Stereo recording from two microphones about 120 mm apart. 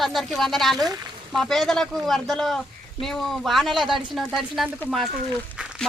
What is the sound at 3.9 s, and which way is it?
Speech, 40° right (ahead or behind).